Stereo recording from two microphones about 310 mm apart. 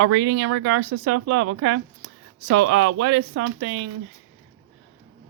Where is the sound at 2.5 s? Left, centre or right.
Right.